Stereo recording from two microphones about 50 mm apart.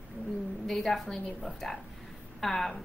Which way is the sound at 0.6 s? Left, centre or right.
Centre.